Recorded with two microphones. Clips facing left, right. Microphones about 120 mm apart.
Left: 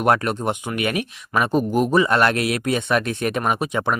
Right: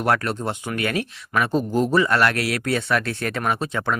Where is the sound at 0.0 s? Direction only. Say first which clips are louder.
Left 3 dB; 20° left (ahead or behind).